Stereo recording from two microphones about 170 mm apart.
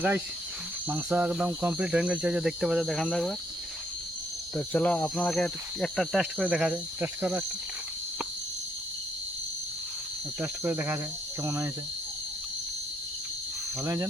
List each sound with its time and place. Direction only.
0.9 s speech: 10° right (ahead or behind)
4.5 s speech: 5° left (ahead or behind); by 7.4 s 10° right (ahead or behind)
10.4 s speech: 10° right (ahead or behind)
13.8 s speech: 15° right (ahead or behind)